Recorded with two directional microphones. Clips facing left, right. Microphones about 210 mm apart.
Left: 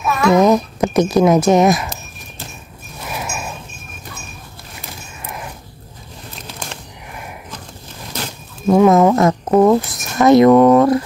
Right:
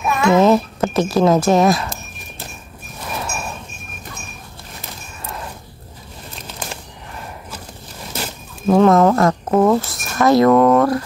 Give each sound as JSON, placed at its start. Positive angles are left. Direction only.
{"t": 0.3, "sound": "a child's voice", "side_deg": 15}
{"t": 3.1, "sound": "a sound", "side_deg": 15}
{"t": 8.1, "sound": "a sound", "side_deg": -5}
{"t": 8.7, "sound": "a woman's voice", "side_deg": 10}
{"t": 9.5, "sound": "speech", "side_deg": 5}
{"t": 9.8, "sound": "speech", "side_deg": 20}